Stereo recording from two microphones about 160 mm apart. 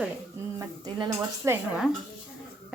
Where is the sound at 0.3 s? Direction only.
20° right (ahead or behind).